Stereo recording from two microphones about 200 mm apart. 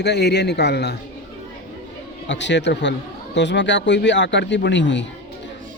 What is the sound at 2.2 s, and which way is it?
Speech, 60° left (ahead or behind).